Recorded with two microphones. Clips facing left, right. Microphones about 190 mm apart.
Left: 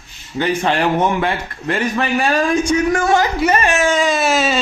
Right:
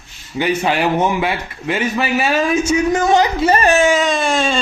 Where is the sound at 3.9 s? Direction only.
Centre (ahead or behind).